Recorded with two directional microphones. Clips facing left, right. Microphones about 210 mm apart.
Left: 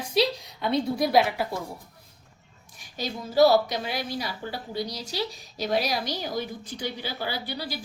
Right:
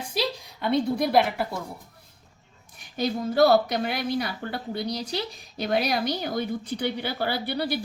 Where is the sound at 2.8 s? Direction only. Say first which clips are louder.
Right 6 dB; 55° right (ahead or behind).